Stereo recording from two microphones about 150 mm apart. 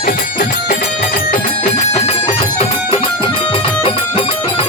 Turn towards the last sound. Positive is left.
turn(degrees=35)  # may be behind; listen again after turning